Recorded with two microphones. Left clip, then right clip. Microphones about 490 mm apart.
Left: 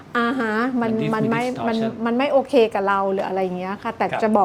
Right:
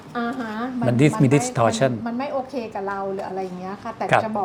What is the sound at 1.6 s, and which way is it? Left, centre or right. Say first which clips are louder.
Speech: right 5 dB; right.